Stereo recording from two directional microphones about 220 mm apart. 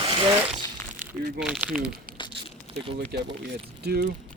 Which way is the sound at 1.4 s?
5° right (ahead or behind).